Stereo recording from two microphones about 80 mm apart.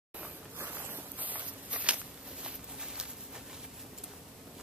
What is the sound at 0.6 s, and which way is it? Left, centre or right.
Walk, right.